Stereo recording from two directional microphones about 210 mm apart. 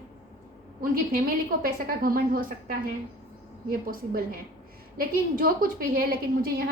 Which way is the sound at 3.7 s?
45° right (ahead or behind).